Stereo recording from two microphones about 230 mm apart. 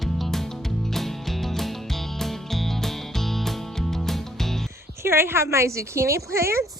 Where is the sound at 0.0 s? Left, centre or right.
Centre.